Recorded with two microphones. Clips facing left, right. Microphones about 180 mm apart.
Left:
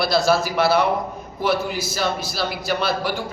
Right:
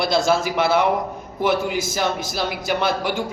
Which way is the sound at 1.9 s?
15° right (ahead or behind).